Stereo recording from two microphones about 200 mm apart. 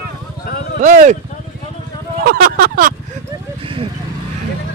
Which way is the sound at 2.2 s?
45° right (ahead or behind).